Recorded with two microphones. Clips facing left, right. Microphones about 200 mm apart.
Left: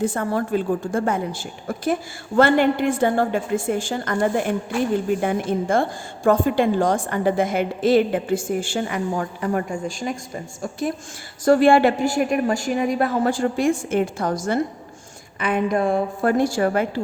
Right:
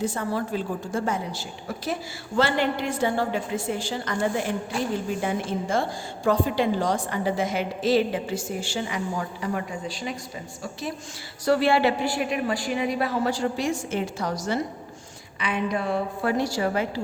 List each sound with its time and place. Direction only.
0.0 s a woman's voice: 55° left (ahead or behind)